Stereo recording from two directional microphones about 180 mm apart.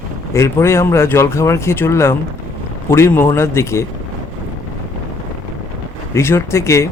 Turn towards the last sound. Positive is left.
turn(degrees=15)  # may be behind; listen again after turning